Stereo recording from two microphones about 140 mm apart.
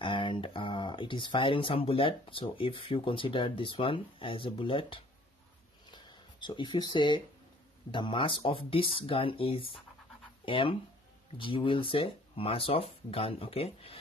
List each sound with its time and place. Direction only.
0.0 s speech: 35° left (ahead or behind)
5.9 s a sound: 35° left (ahead or behind)
7.9 s speech: 35° left (ahead or behind)